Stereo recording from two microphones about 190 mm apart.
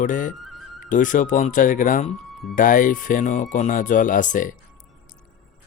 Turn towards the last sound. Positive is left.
turn(degrees=45)  # may be behind; listen again after turning